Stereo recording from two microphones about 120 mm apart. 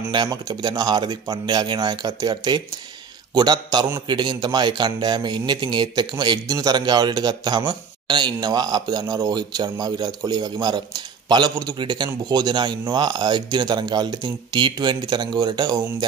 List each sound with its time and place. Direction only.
0.1 s speech: 35° right (ahead or behind)